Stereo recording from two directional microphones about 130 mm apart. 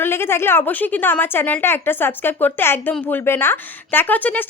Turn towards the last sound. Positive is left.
turn(degrees=15)  # may be behind; listen again after turning